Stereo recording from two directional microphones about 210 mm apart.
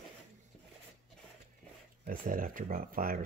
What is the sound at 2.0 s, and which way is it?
Speech, 40° right (ahead or behind).